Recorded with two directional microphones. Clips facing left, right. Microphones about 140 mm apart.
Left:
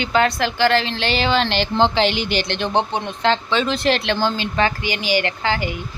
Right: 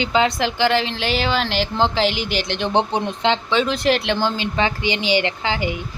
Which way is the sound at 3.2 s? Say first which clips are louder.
Left 1 dB; 15° right (ahead or behind).